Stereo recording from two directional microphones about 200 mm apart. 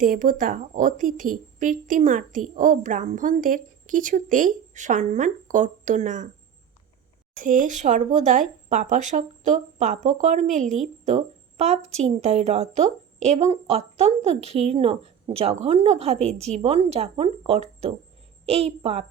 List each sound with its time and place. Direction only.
0.0 s a woman's voice: 45° right (ahead or behind)
7.3 s a woman's voice: 40° right (ahead or behind)